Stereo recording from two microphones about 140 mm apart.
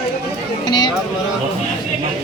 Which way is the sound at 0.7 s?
30° left (ahead or behind).